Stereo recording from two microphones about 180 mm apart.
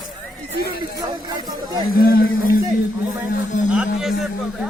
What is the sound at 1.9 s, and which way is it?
Speech, 55° left (ahead or behind).